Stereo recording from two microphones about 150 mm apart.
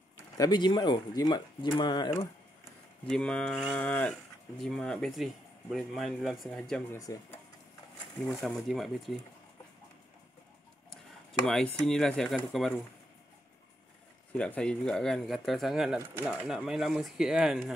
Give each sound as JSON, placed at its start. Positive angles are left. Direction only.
{"t": 0.4, "sound": "speech", "side_deg": 30}
{"t": 3.1, "sound": "speech", "side_deg": 5}
{"t": 3.7, "sound": "livestock", "side_deg": 10}
{"t": 4.1, "sound": "speech", "side_deg": 0}
{"t": 6.9, "sound": "speech", "side_deg": 25}
{"t": 8.2, "sound": "speech", "side_deg": 0}
{"t": 11.4, "sound": "speech", "side_deg": 5}
{"t": 14.3, "sound": "speech", "side_deg": 5}